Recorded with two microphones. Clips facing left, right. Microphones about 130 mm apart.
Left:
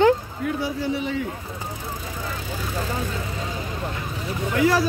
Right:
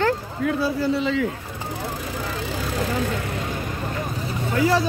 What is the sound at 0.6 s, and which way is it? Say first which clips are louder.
Speech: right 4 dB; 90° right.